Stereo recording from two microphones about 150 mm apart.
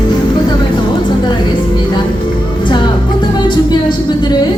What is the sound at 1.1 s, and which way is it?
Music, 30° left (ahead or behind).